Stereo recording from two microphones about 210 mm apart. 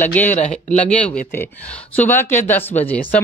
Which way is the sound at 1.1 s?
10° left (ahead or behind).